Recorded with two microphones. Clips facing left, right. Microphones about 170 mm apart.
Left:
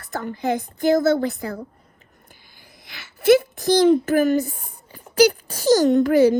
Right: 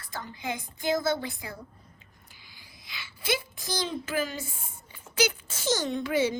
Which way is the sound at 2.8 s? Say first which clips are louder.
Left 16 dB; 60° left (ahead or behind).